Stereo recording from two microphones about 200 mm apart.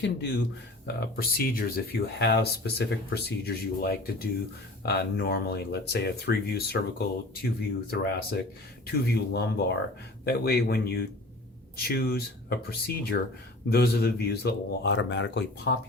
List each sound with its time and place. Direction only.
0.0 s speech: 55° left (ahead or behind)
7.9 s speech: 50° left (ahead or behind)